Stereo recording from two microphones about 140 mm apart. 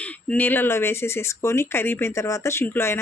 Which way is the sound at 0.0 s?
10° left (ahead or behind).